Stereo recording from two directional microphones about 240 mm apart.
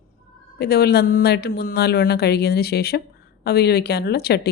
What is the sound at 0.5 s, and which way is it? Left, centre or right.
Speech, left.